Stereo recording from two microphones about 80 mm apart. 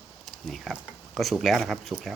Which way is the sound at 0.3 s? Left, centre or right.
Centre.